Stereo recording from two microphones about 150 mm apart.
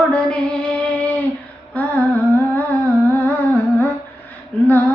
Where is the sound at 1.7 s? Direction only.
10° left (ahead or behind).